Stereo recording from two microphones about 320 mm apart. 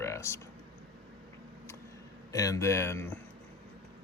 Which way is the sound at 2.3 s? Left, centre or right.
Centre.